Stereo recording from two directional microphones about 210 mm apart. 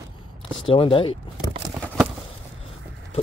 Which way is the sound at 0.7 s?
25° left (ahead or behind).